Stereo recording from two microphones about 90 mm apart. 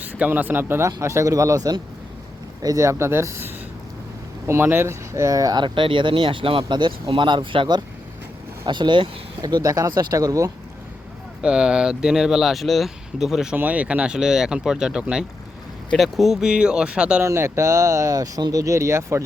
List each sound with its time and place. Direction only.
0.0 s speech: 20° right (ahead or behind); by 5.6 s 45° right (ahead or behind)
5.6 s speech: 70° right (ahead or behind); by 10.5 s 40° right (ahead or behind)
11.4 s speech: 10° right (ahead or behind)
13.6 s speech: 15° right (ahead or behind)
17.2 s speech: 30° right (ahead or behind)